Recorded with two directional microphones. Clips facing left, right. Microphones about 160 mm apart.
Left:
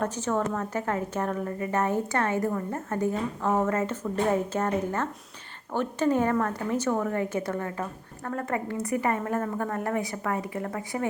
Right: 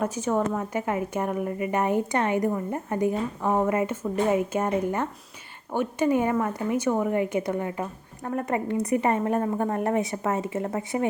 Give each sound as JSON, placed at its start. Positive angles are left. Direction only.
{"t": 0.0, "sound": "a woman's voice", "side_deg": -10}